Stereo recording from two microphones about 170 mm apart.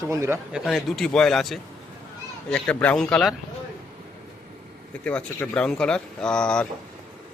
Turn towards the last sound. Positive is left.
turn(degrees=5)  # may be behind; listen again after turning